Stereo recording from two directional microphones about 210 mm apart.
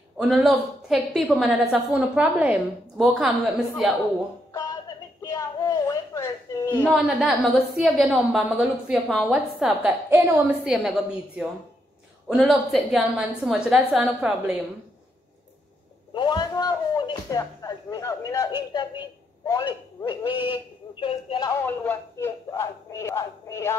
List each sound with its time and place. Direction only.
0.3 s a woman's voice: centre (ahead or behind)
5.2 s a sound: 15° left (ahead or behind)
7.1 s a woman's voice: centre (ahead or behind)
16.1 s a man's voice: 20° left (ahead or behind)
21.6 s speech: 10° left (ahead or behind)